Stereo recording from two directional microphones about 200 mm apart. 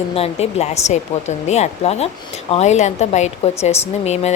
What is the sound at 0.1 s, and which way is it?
A woman's voice, 30° left (ahead or behind).